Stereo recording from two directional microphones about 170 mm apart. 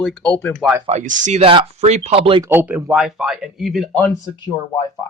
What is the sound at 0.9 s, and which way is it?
Speech, 45° right (ahead or behind).